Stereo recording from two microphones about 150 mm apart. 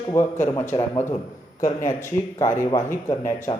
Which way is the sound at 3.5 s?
35° left (ahead or behind).